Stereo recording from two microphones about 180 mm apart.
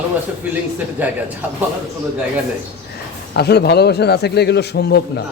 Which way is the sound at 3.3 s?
65° left (ahead or behind).